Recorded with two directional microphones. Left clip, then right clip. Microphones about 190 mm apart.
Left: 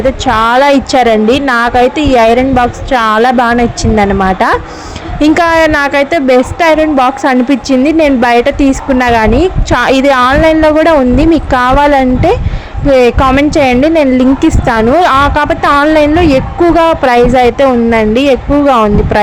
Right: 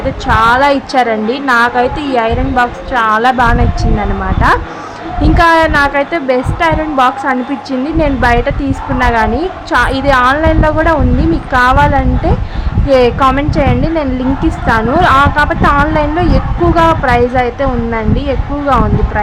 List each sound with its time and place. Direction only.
0.3 s a woman's voice: 35° left (ahead or behind)